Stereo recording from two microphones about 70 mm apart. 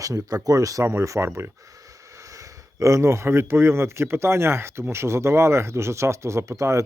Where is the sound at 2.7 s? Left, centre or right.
Right.